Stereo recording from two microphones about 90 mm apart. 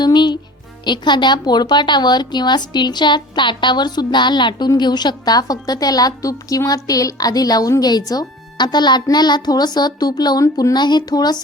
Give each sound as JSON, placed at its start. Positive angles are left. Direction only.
{"t": 0.0, "sound": "music", "side_deg": 55}
{"t": 0.9, "sound": "a woman's voice", "side_deg": 55}